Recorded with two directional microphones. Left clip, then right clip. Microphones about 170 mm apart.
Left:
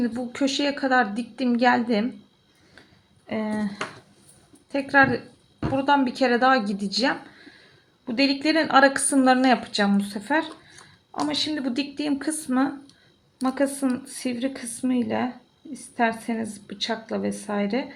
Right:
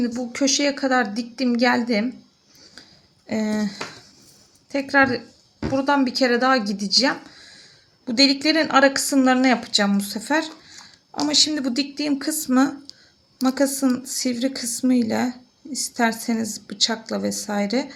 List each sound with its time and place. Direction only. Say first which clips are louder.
0.0 s speech: right 3 dB; 5° right (ahead or behind)
3.2 s speech: right 3 dB; 30° right (ahead or behind)
4.7 s a woman's voice: right 1 dB; 5° right (ahead or behind)
8.0 s speech: right 4 dB; 20° right (ahead or behind)
8.6 s a woman's voice: even; centre (ahead or behind)
9.6 s speech: right 3 dB; 10° right (ahead or behind)
12.5 s a woman's voice: right 5 dB; 30° right (ahead or behind)